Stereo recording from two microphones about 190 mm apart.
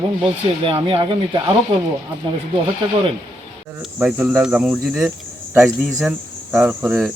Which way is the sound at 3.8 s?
5° right (ahead or behind).